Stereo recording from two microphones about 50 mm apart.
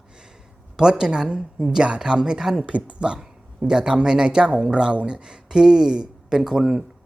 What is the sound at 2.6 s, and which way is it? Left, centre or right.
Speech, right.